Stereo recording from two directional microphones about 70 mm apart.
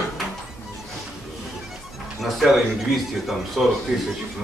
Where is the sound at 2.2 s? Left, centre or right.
Centre.